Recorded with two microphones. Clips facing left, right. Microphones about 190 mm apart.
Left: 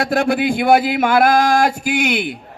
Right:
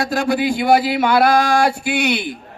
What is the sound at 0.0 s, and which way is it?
Speech, 55° left (ahead or behind).